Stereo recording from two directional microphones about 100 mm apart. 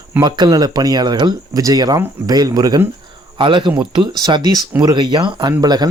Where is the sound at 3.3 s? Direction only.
55° right (ahead or behind).